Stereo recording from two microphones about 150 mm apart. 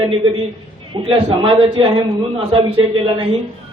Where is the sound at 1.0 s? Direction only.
35° right (ahead or behind).